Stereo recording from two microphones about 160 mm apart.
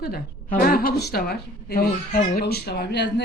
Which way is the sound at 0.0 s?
70° left (ahead or behind).